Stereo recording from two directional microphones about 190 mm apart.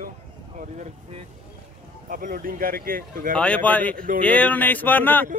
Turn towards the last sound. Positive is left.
turn(degrees=10)  # may be behind; listen again after turning